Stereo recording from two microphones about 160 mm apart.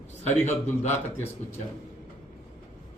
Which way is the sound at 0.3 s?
45° left (ahead or behind).